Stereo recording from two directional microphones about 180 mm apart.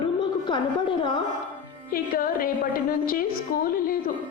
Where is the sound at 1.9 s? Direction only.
50° left (ahead or behind).